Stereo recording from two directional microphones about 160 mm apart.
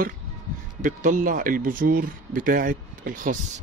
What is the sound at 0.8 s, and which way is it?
Speech, 55° right (ahead or behind).